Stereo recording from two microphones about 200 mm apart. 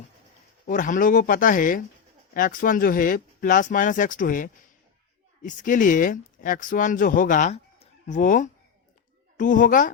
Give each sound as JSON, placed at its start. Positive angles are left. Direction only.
{"t": 0.7, "sound": "speech", "side_deg": 40}